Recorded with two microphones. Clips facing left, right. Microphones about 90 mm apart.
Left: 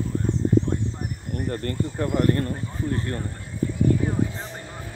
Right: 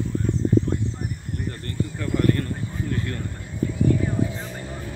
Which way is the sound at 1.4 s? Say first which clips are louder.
Left 3 dB; 40° left (ahead or behind).